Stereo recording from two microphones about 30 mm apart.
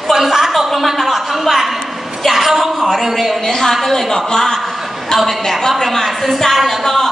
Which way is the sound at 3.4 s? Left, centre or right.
Centre.